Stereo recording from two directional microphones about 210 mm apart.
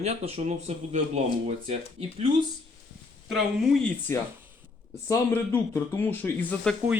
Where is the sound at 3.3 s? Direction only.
Centre (ahead or behind).